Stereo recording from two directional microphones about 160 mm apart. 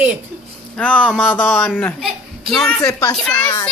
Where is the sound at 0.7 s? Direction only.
5° left (ahead or behind).